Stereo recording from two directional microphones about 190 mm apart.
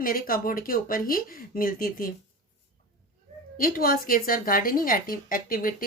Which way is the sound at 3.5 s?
50° left (ahead or behind).